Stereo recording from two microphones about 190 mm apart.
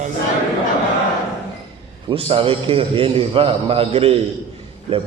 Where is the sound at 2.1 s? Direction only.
30° right (ahead or behind).